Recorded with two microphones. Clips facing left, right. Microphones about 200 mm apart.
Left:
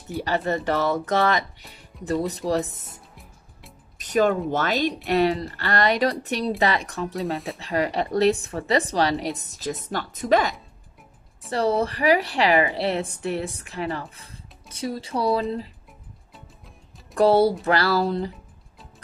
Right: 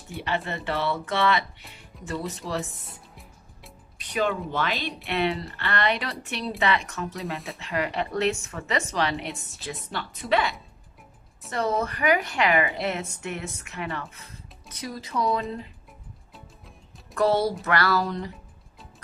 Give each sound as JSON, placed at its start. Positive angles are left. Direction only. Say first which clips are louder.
{"t": 0.2, "sound": "a woman's voice", "louder": "left 5 dB", "side_deg": 40}
{"t": 2.9, "sound": "music", "louder": "even", "side_deg": 0}
{"t": 4.0, "sound": "a woman's voice", "louder": "left 6 dB", "side_deg": 45}
{"t": 17.1, "sound": "a woman's voice", "louder": "left 5 dB", "side_deg": 30}